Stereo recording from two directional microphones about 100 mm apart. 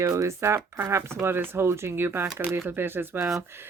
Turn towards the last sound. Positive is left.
turn(degrees=-25)  # may be behind; listen again after turning